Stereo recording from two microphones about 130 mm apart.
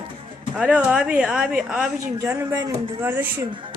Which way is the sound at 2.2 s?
25° right (ahead or behind).